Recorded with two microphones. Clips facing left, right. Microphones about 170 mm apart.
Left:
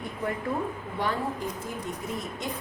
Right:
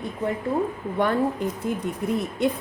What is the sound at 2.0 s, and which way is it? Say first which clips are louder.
Speech: right 12 dB; 60° right (ahead or behind).